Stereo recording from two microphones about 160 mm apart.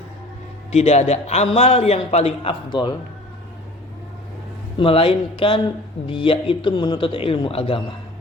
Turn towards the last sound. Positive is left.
turn(degrees=35)  # may be behind; listen again after turning